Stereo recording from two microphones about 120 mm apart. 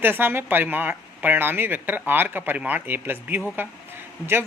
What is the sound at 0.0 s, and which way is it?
Speech, 15° right (ahead or behind).